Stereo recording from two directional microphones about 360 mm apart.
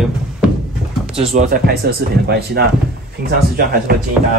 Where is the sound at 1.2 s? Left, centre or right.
Right.